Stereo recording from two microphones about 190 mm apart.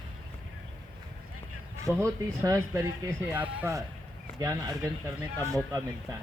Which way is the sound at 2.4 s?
15° right (ahead or behind).